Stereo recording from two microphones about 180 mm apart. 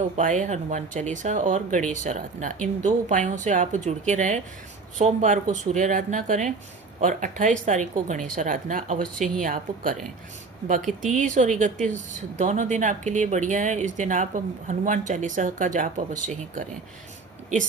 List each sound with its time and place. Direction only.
0.2 s speech: 45° right (ahead or behind)
11.0 s speech: 45° right (ahead or behind)